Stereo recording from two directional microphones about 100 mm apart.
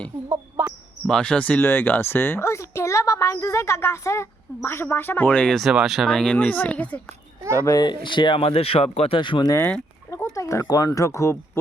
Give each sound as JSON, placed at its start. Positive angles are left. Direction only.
{"t": 0.6, "sound": "basketball bounce", "side_deg": -20}
{"t": 1.0, "sound": "speech", "side_deg": 5}
{"t": 5.5, "sound": "speech", "side_deg": -5}
{"t": 6.1, "sound": "speech", "side_deg": 10}
{"t": 7.6, "sound": "speech", "side_deg": 35}
{"t": 7.9, "sound": "speech", "side_deg": 50}
{"t": 8.4, "sound": "speech", "side_deg": 75}
{"t": 9.6, "sound": "speech", "side_deg": 15}
{"t": 10.3, "sound": "speech", "side_deg": 35}